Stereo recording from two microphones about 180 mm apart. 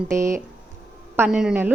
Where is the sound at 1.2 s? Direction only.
5° right (ahead or behind).